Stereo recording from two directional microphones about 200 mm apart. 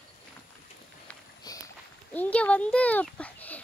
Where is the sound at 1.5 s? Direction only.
20° left (ahead or behind).